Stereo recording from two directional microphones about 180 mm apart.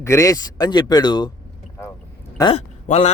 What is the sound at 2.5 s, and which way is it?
Speech, 40° left (ahead or behind).